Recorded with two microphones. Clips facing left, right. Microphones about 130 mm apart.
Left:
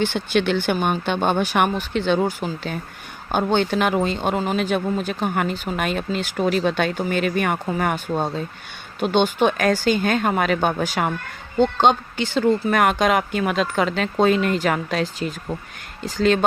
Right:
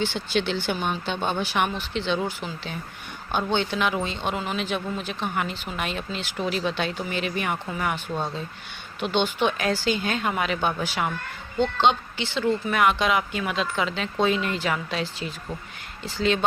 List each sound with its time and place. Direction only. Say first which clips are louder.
0.0 s speech: left 5 dB; 55° left (ahead or behind)